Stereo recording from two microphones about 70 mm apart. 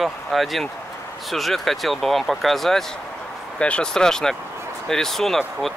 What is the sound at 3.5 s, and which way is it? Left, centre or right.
Speech, centre.